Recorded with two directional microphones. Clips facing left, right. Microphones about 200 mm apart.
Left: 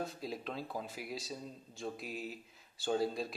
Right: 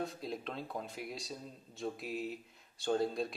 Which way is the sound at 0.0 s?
Centre (ahead or behind).